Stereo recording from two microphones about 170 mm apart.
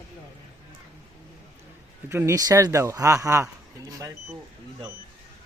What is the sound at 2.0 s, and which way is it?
Speech, 15° right (ahead or behind).